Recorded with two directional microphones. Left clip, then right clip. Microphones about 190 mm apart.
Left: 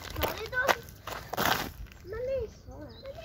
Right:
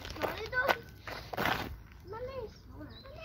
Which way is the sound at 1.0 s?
35° left (ahead or behind).